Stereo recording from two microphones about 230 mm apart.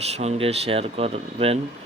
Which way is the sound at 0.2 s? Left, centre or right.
Right.